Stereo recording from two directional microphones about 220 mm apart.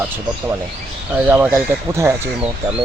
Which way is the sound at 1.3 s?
10° right (ahead or behind).